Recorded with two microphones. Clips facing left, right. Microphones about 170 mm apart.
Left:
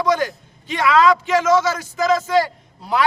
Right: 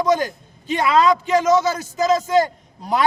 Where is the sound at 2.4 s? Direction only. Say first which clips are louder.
Right 3 dB; 45° right (ahead or behind).